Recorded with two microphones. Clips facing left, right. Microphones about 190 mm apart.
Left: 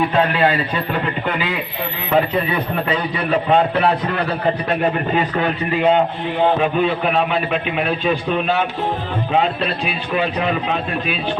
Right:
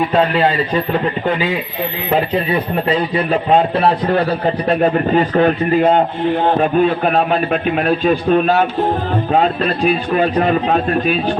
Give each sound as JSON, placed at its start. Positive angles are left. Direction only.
{"t": 3.8, "sound": "a man's voice", "side_deg": -35}